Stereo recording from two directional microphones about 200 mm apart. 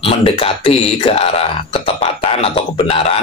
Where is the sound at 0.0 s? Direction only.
25° left (ahead or behind).